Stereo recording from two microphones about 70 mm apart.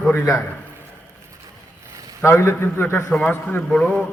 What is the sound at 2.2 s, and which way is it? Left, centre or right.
A man's voice, left.